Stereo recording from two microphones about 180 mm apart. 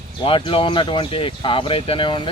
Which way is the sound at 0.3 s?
30° left (ahead or behind).